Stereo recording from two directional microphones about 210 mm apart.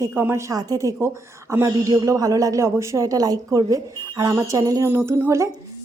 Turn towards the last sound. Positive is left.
turn(degrees=-15)  # may be behind; listen again after turning